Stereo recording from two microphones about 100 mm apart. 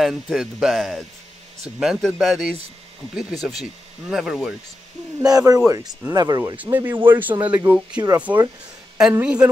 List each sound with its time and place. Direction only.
0.0 s speech: 5° right (ahead or behind)
5.2 s speech: 35° right (ahead or behind)
6.5 s speech: 15° right (ahead or behind)
8.3 s speech: 25° right (ahead or behind)
9.2 s speech: 10° right (ahead or behind)